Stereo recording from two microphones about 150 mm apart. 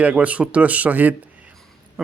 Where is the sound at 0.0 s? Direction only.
10° right (ahead or behind).